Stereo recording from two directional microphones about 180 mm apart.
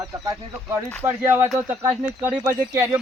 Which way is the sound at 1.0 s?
15° right (ahead or behind).